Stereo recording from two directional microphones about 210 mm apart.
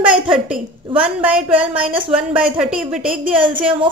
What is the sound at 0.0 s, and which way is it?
A woman's voice, 5° right (ahead or behind).